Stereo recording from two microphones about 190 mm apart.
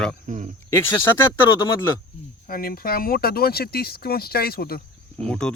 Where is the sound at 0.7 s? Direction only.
15° left (ahead or behind).